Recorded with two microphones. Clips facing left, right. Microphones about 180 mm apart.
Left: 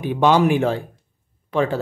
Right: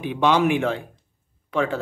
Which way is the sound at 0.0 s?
40° left (ahead or behind).